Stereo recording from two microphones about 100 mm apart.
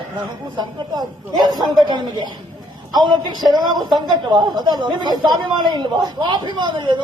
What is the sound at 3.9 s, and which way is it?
A man's voice, 45° right (ahead or behind).